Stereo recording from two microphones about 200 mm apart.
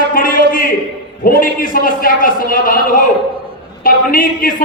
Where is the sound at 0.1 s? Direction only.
45° left (ahead or behind).